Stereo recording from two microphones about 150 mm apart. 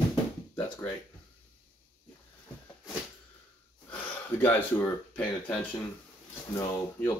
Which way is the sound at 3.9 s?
10° left (ahead or behind).